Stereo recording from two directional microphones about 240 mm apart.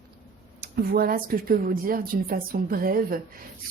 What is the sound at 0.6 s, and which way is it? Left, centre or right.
Speech, right.